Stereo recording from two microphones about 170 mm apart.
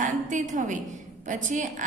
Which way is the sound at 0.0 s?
45° right (ahead or behind).